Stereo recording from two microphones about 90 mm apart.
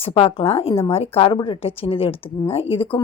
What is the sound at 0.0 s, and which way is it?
A woman's voice, 90° left.